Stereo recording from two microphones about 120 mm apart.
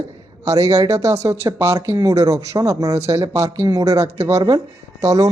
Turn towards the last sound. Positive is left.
turn(degrees=-30)  # may be behind; listen again after turning